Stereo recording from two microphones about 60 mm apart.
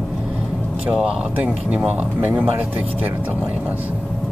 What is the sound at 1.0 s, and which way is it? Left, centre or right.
Speech, centre.